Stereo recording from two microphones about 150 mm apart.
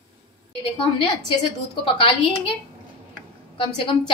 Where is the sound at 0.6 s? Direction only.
35° left (ahead or behind).